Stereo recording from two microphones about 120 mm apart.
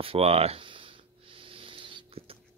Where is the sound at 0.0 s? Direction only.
55° right (ahead or behind).